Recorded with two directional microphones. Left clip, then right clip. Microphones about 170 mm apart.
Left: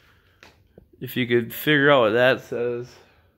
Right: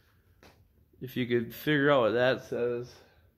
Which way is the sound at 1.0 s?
40° left (ahead or behind).